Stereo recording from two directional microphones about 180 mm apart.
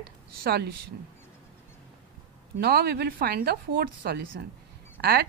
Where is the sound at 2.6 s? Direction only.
60° right (ahead or behind).